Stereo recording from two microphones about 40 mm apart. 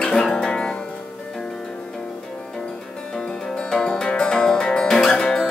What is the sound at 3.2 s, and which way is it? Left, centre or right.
Music, centre.